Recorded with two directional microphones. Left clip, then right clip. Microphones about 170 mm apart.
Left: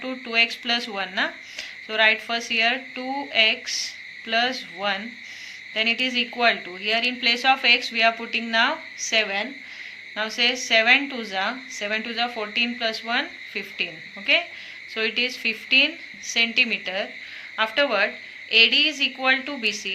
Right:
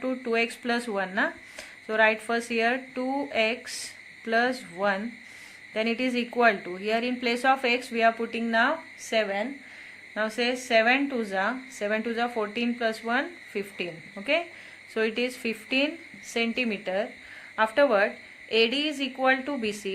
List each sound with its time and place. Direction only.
0.0 s a woman's voice: 45° right (ahead or behind)
14.9 s a woman's voice: 50° right (ahead or behind)